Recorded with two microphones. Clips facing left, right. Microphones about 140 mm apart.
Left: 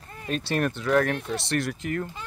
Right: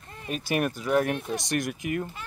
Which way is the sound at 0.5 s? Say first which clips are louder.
Left 1 dB; 10° right (ahead or behind).